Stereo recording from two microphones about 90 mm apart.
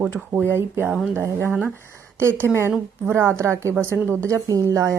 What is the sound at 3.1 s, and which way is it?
A woman's voice, 30° right (ahead or behind).